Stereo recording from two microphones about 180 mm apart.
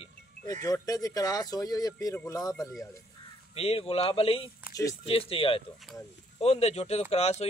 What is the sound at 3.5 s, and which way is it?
Speech, 35° left (ahead or behind).